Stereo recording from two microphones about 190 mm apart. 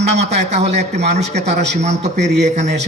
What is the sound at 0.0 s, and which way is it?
A man's voice, 35° right (ahead or behind).